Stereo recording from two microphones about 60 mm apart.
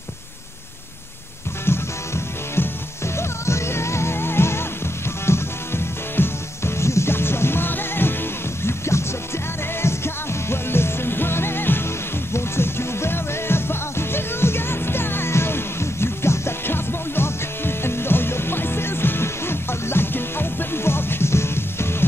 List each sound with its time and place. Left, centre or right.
1.7 s music: left